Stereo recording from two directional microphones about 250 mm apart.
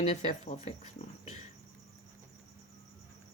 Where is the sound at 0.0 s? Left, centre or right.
Left.